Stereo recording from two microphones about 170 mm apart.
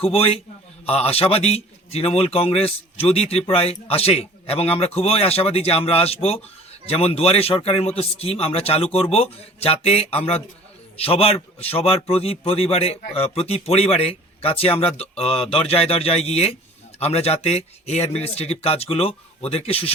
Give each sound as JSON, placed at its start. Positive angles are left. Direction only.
{"t": 0.0, "sound": "speech", "side_deg": 35}